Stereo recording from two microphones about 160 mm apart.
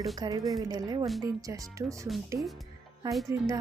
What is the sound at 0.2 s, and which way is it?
Speech, 25° right (ahead or behind).